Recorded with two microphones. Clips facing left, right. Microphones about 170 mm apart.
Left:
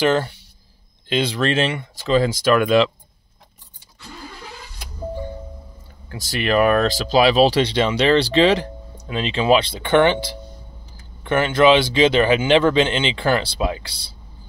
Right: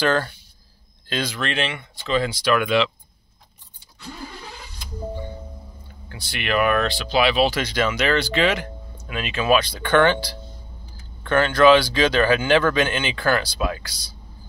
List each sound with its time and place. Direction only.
0.0 s speech: 20° left (ahead or behind); by 2.9 s 40° left (ahead or behind)
6.0 s speech: 40° left (ahead or behind)